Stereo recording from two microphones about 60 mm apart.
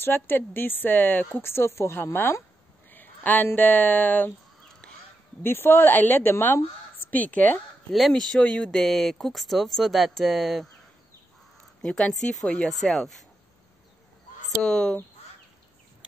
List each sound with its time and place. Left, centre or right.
0.0 s a woman's voice: left
1.4 s speech: left
4.8 s goose: centre
5.4 s a woman's voice: left
7.1 s speech: left
8.1 s speech: centre
8.7 s speech: centre
11.8 s speech: centre
14.6 s speech: centre